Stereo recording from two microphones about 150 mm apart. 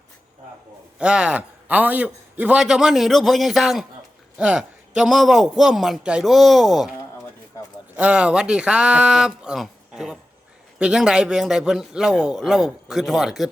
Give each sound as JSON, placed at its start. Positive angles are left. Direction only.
{"t": 0.9, "sound": "a man's voice", "side_deg": -5}
{"t": 7.9, "sound": "a man's voice", "side_deg": -10}